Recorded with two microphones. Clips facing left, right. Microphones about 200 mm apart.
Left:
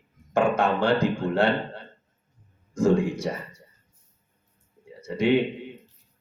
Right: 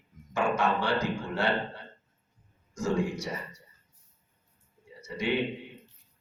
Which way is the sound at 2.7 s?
55° left (ahead or behind).